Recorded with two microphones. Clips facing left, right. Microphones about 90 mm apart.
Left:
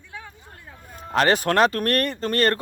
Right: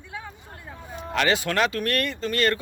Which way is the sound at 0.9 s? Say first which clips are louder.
Left 3 dB; 40° left (ahead or behind).